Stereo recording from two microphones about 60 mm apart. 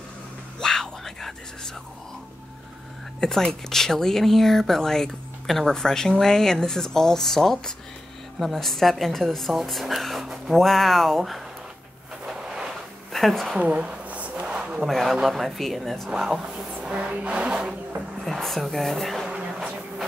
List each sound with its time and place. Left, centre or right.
0.6 s whispering: centre
3.2 s speech: centre
10.5 s speech: centre
12.3 s a sound: centre
13.1 s speech: centre
13.6 s a sound: right
14.9 s speech: centre
16.1 s speech: centre
16.8 s vehicle: right
18.2 s speech: centre
19.2 s a sound: centre